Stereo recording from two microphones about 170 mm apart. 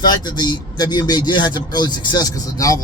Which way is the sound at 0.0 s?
25° left (ahead or behind).